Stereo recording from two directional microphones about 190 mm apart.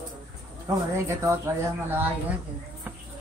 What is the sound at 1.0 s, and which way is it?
Speech, 15° right (ahead or behind).